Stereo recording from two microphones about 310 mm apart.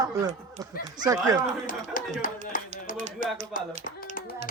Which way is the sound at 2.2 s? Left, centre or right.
Left.